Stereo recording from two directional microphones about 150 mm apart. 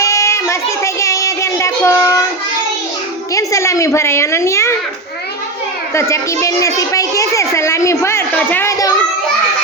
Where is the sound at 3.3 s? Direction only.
20° left (ahead or behind).